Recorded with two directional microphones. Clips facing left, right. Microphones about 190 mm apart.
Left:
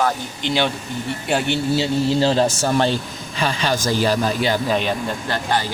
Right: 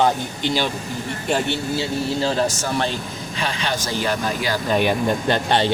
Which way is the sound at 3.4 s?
40° left (ahead or behind).